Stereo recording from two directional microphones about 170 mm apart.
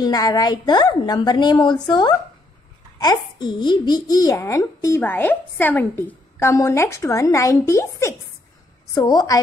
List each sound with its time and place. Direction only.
0.0 s a woman's voice: 25° left (ahead or behind)